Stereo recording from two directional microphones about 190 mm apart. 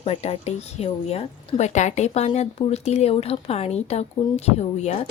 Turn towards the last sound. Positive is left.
turn(degrees=35)  # may be behind; listen again after turning